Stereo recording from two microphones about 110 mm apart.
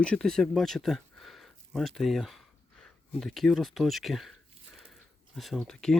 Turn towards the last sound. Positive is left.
turn(degrees=5)  # may be behind; listen again after turning